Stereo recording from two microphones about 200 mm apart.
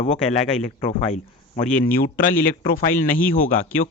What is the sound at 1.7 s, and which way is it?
A man's voice, 45° left (ahead or behind).